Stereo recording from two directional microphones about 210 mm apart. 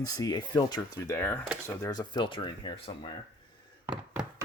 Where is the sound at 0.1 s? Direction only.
15° left (ahead or behind).